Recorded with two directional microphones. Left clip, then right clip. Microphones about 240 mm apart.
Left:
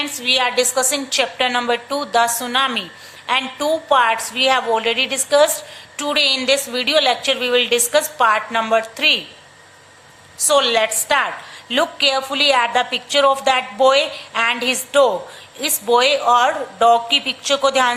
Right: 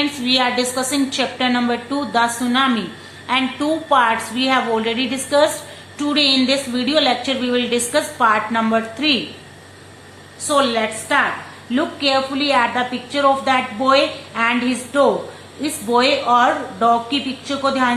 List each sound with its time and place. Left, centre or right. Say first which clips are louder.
0.0 s a woman's voice: even; left
10.5 s a woman's voice: left 2 dB; left